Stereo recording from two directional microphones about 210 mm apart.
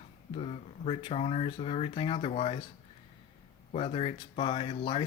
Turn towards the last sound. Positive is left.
turn(degrees=25)  # may be behind; listen again after turning